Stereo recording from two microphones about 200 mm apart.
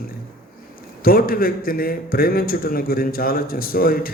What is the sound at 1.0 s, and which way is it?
A man's voice, 45° left (ahead or behind).